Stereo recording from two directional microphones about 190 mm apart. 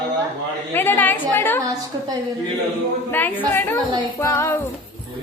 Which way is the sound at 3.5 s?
10° left (ahead or behind).